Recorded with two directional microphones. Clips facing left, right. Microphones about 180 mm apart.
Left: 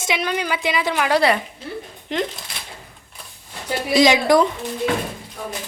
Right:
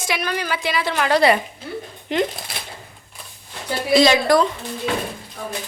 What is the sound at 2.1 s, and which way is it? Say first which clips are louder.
Speech: right 3 dB; 5° right (ahead or behind).